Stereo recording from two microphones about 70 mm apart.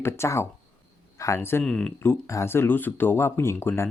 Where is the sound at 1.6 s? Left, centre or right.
Centre.